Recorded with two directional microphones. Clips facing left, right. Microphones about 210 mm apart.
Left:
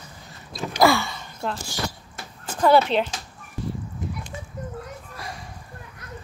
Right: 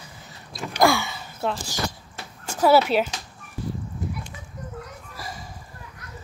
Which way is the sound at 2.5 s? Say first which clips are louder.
Even; 5° right (ahead or behind).